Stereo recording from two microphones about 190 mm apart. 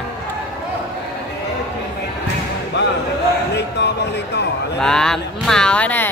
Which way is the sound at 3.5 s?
65° left (ahead or behind).